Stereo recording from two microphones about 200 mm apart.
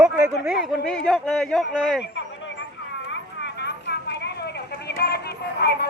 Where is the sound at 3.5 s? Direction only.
55° left (ahead or behind).